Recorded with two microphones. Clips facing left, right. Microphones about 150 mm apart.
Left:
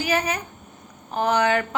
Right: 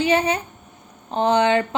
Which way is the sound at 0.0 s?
25° right (ahead or behind).